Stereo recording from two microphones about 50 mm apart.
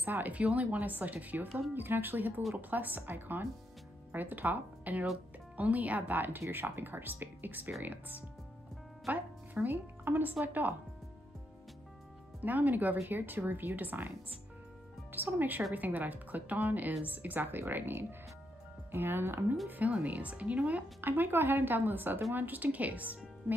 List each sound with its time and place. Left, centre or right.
0.0 s a woman's voice: right
0.4 s a woman's voice: right
1.7 s a woman's voice: right
12.4 s a woman's voice: right
15.3 s a woman's voice: right
19.7 s speech: right
21.0 s a woman's voice: right
23.5 s speech: right